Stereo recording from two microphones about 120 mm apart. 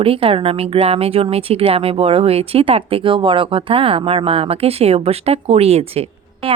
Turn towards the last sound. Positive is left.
turn(degrees=-55)  # may be behind; listen again after turning